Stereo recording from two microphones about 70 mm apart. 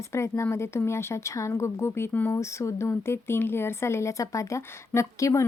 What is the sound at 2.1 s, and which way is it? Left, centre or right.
Speech, left.